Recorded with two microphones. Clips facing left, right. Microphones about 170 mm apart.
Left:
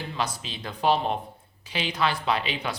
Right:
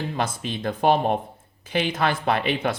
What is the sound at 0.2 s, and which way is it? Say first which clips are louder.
Speech: right 2 dB; 55° right (ahead or behind).